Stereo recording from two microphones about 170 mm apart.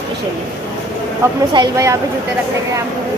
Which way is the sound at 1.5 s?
20° right (ahead or behind).